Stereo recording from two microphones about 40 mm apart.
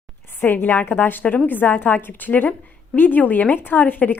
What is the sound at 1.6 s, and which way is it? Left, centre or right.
Speech, left.